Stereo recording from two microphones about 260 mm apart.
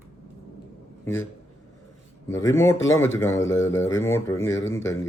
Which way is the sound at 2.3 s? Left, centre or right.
Centre.